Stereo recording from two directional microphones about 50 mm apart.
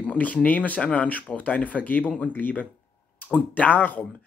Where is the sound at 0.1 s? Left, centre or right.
Left.